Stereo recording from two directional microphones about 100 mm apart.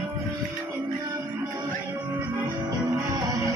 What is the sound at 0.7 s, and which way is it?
Music, 35° right (ahead or behind).